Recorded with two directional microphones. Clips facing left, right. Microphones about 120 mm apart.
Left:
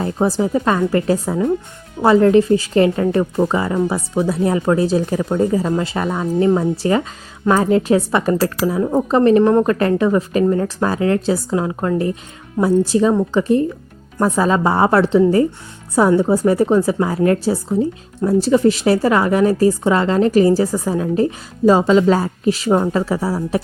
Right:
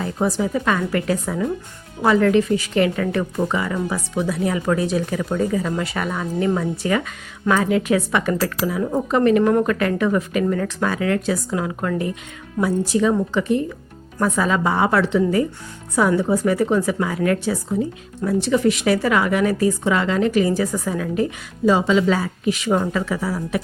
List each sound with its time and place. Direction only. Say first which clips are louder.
0.0 s speech: left 4 dB; 30° left (ahead or behind)